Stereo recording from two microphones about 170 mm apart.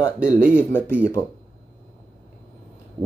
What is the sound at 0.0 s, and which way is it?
Speech, 5° right (ahead or behind).